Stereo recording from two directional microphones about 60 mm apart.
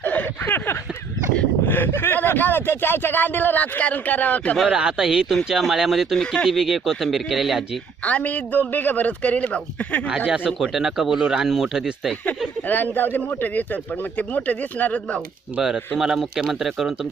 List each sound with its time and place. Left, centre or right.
0.0 s a sound: left
1.6 s speech: left
4.7 s speech: centre
6.1 s speech: centre
6.6 s speech: centre
8.0 s a man's voice: left
10.1 s speech: centre
10.6 s speech: centre
12.6 s a man's voice: left
16.0 s speech: centre